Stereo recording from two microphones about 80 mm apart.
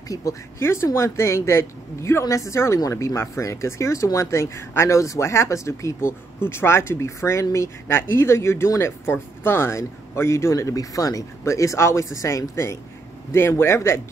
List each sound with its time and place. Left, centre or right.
0.1 s speech: left
0.6 s a woman's voice: left